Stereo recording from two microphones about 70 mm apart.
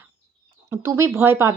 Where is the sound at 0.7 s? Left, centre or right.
Right.